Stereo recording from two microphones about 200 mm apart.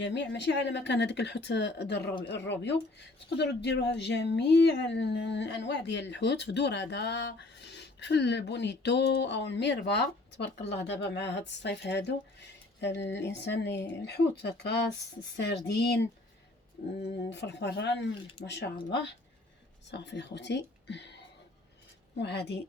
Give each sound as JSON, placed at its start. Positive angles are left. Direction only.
{"t": 0.0, "sound": "speech", "side_deg": 60}
{"t": 16.8, "sound": "speech", "side_deg": 45}
{"t": 17.2, "sound": "speech", "side_deg": 60}
{"t": 22.2, "sound": "speech", "side_deg": 55}